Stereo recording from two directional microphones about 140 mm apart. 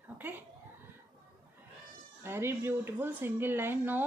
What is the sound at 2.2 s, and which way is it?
Speech, 15° right (ahead or behind).